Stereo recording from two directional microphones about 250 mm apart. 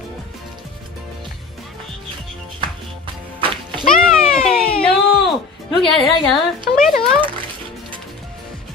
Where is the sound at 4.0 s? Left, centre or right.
Centre.